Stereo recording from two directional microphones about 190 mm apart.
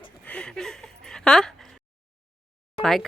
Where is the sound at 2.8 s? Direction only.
Centre (ahead or behind).